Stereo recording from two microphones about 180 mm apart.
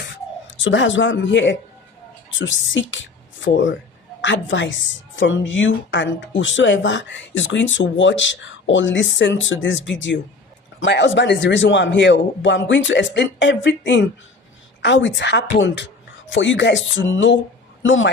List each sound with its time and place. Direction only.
0.5 s a woman's voice: 90° left
16.3 s speech: 90° left